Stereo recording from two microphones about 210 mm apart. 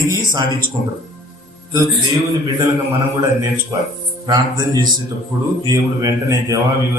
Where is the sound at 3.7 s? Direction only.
15° right (ahead or behind).